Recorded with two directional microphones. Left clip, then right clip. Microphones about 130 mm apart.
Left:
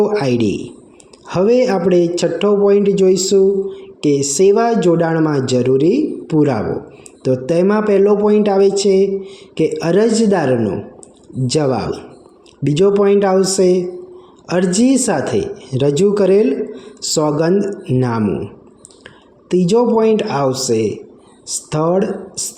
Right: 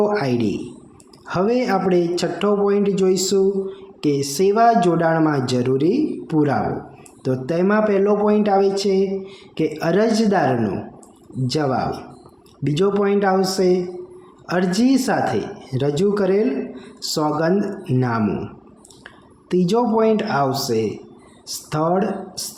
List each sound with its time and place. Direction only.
0.0 s a man's voice: 30° left (ahead or behind)